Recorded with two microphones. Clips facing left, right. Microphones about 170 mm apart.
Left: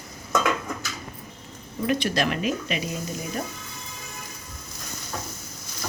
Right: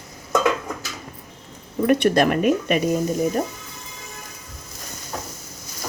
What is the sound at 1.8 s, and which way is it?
Speech, 55° right (ahead or behind).